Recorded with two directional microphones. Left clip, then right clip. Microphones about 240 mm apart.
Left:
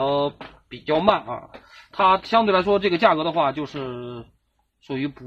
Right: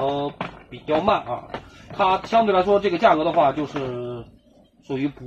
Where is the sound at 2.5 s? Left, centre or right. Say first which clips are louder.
Right 1 dB; left.